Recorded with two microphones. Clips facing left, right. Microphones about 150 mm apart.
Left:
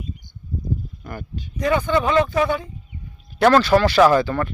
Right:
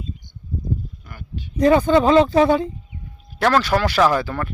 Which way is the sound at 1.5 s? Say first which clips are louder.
Right 5 dB; 30° right (ahead or behind).